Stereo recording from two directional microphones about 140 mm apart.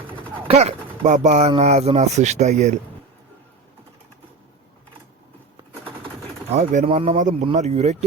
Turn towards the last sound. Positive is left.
turn(degrees=-50)  # may be behind; listen again after turning